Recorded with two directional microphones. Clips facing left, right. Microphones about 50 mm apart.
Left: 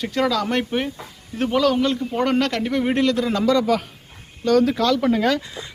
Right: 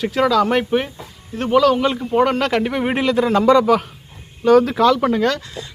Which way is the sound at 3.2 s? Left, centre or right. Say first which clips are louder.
Right 6 dB; right.